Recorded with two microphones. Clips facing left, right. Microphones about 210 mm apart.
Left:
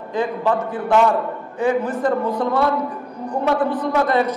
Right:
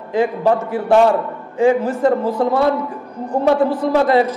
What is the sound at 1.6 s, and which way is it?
Speech, 25° right (ahead or behind).